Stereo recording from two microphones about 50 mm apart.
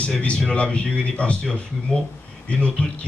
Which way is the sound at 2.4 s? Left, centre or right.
Left.